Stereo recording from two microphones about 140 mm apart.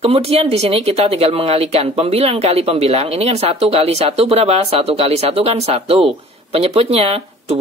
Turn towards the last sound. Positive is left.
turn(degrees=-45)  # may be behind; listen again after turning